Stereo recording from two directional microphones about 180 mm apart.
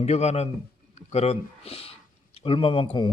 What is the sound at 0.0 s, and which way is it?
Speech, 35° left (ahead or behind).